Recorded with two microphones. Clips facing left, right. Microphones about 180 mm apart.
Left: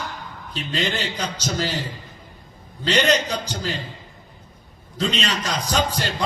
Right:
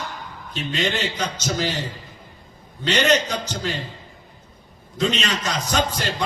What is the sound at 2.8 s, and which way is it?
Speech, 35° left (ahead or behind).